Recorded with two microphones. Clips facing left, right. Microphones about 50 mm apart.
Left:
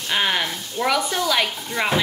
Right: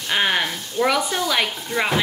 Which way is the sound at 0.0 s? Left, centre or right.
Centre.